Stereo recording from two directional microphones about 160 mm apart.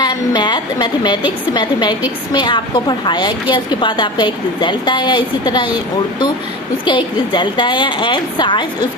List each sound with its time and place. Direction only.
0.0 s a sound: 25° left (ahead or behind)
1.5 s a woman's voice: 30° left (ahead or behind)
6.8 s a woman's voice: 30° left (ahead or behind)